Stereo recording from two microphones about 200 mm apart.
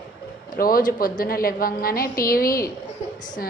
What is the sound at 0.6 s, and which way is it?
A woman's voice, 45° left (ahead or behind).